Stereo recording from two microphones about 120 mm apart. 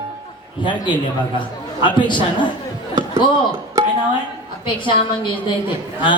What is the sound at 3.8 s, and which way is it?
Music, 30° right (ahead or behind).